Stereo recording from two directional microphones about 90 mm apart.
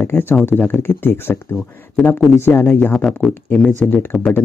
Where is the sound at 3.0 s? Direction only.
5° left (ahead or behind).